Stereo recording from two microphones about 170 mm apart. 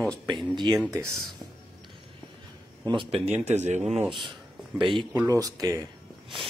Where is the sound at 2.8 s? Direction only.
30° right (ahead or behind).